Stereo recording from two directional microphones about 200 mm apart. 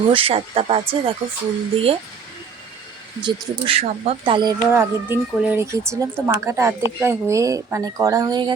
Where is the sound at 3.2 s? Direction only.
30° right (ahead or behind).